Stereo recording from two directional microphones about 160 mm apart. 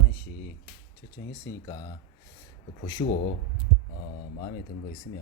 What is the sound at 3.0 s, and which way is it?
Speech, 45° left (ahead or behind).